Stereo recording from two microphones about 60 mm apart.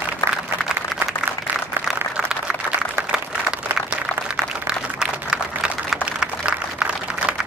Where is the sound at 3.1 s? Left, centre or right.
Centre.